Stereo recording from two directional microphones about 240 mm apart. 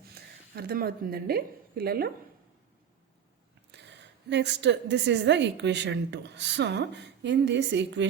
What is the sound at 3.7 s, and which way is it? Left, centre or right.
A woman's voice, right.